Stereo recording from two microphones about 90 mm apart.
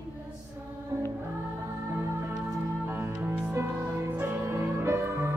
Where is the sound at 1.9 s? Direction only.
25° right (ahead or behind).